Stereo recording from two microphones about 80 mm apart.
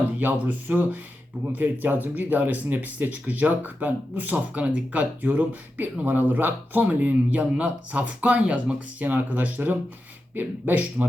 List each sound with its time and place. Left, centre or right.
0.2 s speech: right